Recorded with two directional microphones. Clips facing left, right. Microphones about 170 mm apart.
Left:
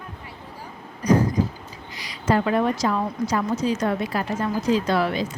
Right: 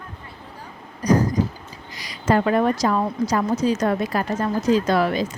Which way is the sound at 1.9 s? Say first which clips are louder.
Right 2 dB; 40° right (ahead or behind).